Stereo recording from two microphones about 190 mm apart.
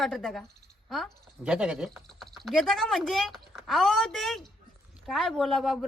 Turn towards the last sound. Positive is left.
turn(degrees=0)  # may be behind; listen again after turning